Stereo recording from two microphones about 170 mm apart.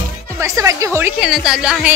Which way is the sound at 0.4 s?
15° right (ahead or behind).